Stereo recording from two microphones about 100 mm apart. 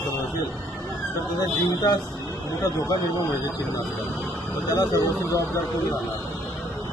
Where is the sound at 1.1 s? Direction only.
40° left (ahead or behind).